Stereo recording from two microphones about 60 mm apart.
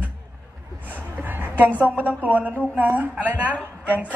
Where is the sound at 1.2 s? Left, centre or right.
Right.